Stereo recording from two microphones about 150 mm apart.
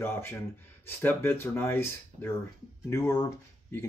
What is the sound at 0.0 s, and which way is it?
Speech, 15° left (ahead or behind).